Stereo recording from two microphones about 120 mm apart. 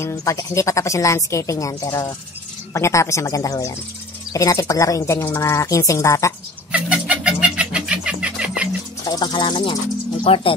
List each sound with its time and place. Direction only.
0.0 s a woman's voice: 25° left (ahead or behind)
6.7 s chicken: 10° right (ahead or behind)
9.0 s speech: 35° left (ahead or behind)